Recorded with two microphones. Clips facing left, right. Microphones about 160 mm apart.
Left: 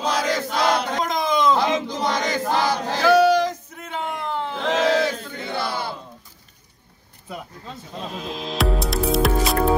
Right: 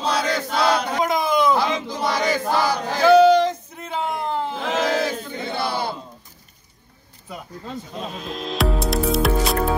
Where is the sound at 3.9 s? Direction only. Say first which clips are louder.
Right 3 dB; 35° right (ahead or behind).